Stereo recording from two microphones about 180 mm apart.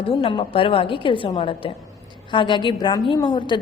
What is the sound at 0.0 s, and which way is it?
A woman's voice, 30° left (ahead or behind).